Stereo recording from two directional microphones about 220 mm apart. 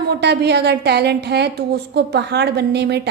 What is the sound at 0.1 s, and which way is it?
A woman's voice, 50° right (ahead or behind).